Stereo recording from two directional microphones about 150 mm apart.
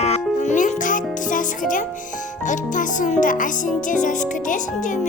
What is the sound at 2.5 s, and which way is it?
Speech, 55° left (ahead or behind).